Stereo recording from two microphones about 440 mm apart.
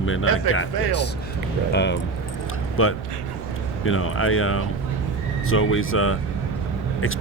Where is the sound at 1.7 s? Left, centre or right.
Left.